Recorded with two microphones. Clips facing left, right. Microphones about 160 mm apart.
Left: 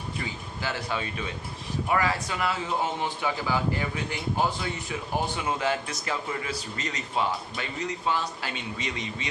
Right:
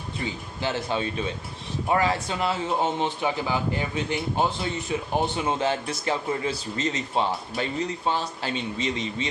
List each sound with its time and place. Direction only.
0.6 s a man's voice: 25° right (ahead or behind)